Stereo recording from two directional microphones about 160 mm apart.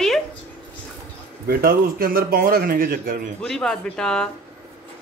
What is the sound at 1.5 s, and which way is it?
A man's voice, 70° right (ahead or behind).